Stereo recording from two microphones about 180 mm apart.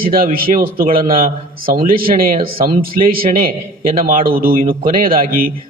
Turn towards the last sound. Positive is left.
turn(degrees=-50)  # may be behind; listen again after turning